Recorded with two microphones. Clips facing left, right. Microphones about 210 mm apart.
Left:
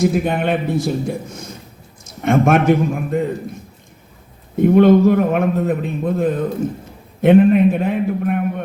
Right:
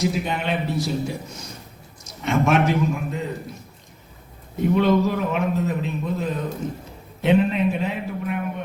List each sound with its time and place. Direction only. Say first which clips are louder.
0.0 s a man's voice: left 7 dB; 50° left (ahead or behind)
4.5 s a man's voice: left 8 dB; 50° left (ahead or behind)